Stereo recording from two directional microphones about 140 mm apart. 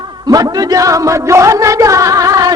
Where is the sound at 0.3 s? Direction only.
25° right (ahead or behind).